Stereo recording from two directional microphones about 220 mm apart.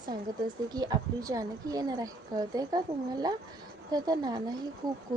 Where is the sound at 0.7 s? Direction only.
20° right (ahead or behind).